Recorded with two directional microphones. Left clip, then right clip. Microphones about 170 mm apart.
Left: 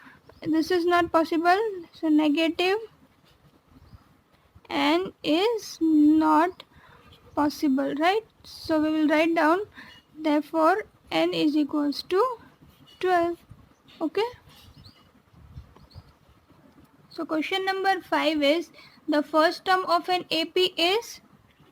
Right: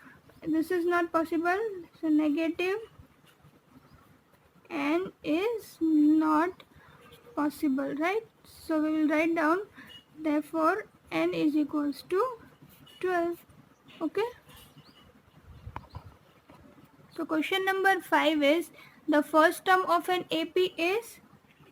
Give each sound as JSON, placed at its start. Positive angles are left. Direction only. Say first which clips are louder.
{"t": 0.0, "sound": "speech", "louder": "left 5 dB", "side_deg": 45}
{"t": 4.7, "sound": "speech", "louder": "left 6 dB", "side_deg": 50}
{"t": 17.3, "sound": "a woman's voice", "louder": "left 2 dB", "side_deg": 15}
{"t": 17.7, "sound": "a woman's voice", "louder": "right 1 dB", "side_deg": 5}
{"t": 20.3, "sound": "speech", "louder": "left 4 dB", "side_deg": 30}